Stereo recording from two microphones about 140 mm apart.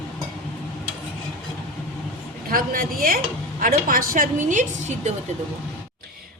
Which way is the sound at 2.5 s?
90° right.